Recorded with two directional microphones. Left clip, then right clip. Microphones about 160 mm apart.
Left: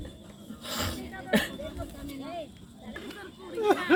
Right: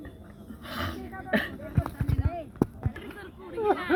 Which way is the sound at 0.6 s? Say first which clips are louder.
Left 1 dB; 50° left (ahead or behind).